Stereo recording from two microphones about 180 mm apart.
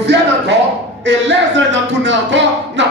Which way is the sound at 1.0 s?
85° right.